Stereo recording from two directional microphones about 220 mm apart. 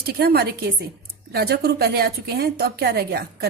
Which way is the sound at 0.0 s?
45° right (ahead or behind).